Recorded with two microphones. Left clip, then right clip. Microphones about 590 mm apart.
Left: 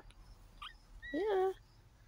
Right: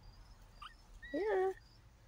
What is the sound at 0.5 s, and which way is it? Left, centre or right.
Dog, left.